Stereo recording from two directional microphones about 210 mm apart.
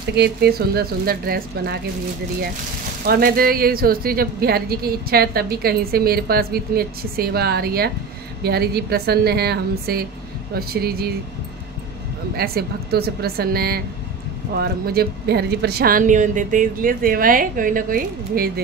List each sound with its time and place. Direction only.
0.1 s speech: 50° right (ahead or behind)
3.1 s speech: 45° right (ahead or behind)
12.4 s speech: 50° right (ahead or behind)